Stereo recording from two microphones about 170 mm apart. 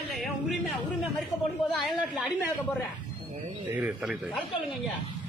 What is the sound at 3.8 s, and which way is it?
Speech, 5° right (ahead or behind).